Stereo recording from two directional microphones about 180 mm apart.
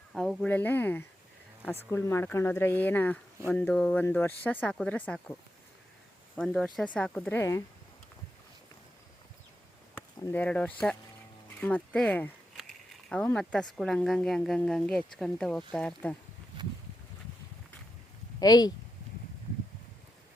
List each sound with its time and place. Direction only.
0.1 s speech: 5° left (ahead or behind)
9.9 s speech: 10° left (ahead or behind)
18.3 s speech: 20° left (ahead or behind)